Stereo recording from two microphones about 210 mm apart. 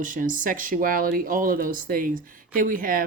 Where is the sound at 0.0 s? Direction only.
40° right (ahead or behind).